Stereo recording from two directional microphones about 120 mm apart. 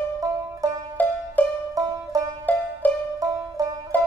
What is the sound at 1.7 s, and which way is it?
Music, 30° right (ahead or behind).